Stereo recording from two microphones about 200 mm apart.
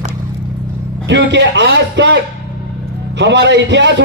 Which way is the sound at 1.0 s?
65° right (ahead or behind).